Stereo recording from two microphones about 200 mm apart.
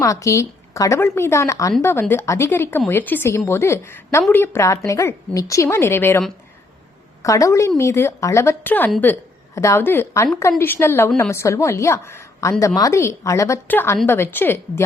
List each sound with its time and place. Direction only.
0.0 s a woman's voice: 15° left (ahead or behind)